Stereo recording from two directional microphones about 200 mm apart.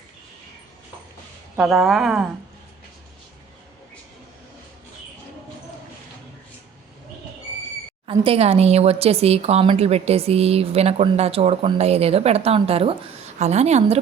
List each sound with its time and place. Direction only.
1.5 s a woman's voice: centre (ahead or behind)
8.0 s speech: 25° right (ahead or behind)